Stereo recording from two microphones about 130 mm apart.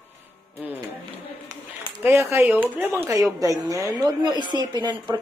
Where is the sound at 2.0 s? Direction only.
15° right (ahead or behind).